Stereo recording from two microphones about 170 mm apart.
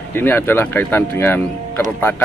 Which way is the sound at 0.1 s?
15° left (ahead or behind).